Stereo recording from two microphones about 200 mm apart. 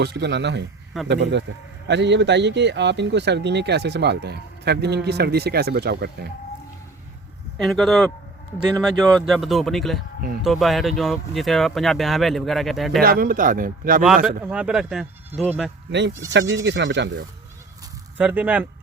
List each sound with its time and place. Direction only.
0.0 s speech: 60° right (ahead or behind)
7.6 s speech: centre (ahead or behind)
13.0 s speech: 50° right (ahead or behind)
14.4 s speech: 5° right (ahead or behind)
15.9 s speech: 60° right (ahead or behind)
18.2 s speech: 10° right (ahead or behind)